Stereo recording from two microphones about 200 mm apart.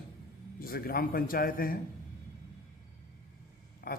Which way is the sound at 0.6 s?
50° left (ahead or behind).